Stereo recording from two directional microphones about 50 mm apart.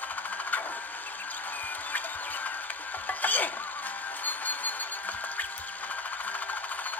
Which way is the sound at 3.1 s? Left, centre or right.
Left.